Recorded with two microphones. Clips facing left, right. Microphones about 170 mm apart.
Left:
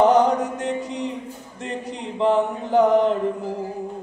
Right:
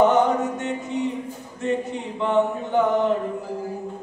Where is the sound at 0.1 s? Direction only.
35° left (ahead or behind).